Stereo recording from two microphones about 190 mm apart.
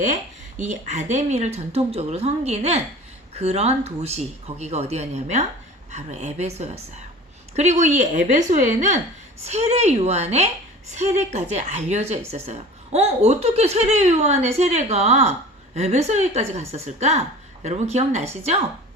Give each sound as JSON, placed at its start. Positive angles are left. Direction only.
{"t": 0.6, "sound": "a woman's voice", "side_deg": -40}